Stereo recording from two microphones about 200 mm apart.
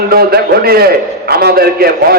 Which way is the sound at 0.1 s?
50° right (ahead or behind).